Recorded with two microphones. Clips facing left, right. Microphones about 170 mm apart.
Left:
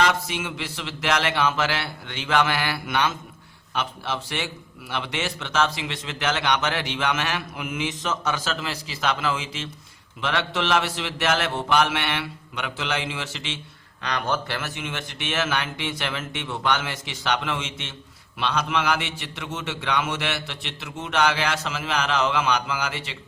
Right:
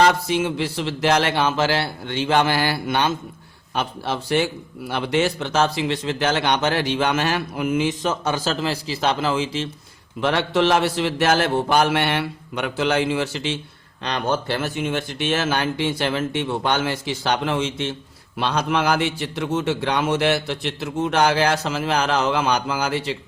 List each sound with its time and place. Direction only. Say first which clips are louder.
0.0 s speech: right 6 dB; 35° right (ahead or behind)